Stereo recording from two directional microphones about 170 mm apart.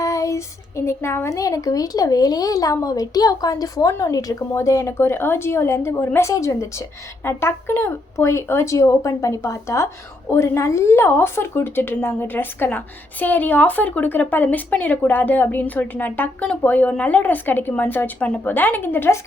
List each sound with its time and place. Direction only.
0.0 s speech: 20° left (ahead or behind)